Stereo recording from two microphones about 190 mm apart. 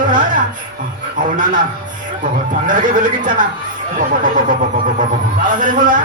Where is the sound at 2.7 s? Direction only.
45° right (ahead or behind).